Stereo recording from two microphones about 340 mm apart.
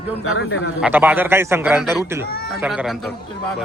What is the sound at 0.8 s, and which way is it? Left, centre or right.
A man's voice, centre.